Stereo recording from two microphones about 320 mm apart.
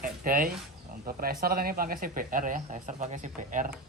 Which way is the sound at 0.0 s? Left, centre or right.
Right.